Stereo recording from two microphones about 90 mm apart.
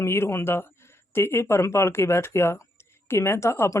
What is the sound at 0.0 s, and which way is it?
Speech, 30° left (ahead or behind).